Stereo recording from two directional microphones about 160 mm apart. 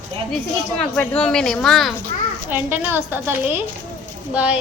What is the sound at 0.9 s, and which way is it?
A woman's voice, 5° left (ahead or behind).